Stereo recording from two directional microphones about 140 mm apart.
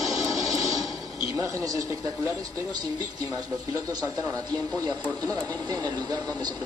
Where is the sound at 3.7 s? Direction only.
25° right (ahead or behind).